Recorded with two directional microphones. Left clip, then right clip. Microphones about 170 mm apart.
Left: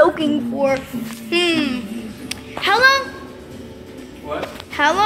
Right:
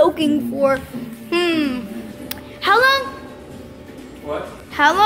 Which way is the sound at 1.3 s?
5° right (ahead or behind).